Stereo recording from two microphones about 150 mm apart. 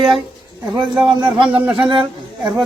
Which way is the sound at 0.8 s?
30° right (ahead or behind).